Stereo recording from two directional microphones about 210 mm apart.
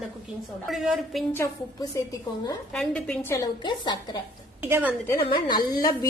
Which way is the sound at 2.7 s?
5° left (ahead or behind).